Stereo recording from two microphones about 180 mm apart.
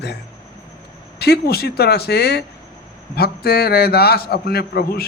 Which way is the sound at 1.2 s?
60° left (ahead or behind).